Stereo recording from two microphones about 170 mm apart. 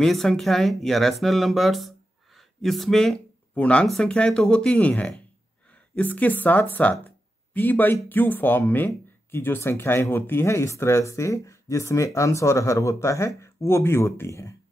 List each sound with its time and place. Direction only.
0.0 s speech: centre (ahead or behind)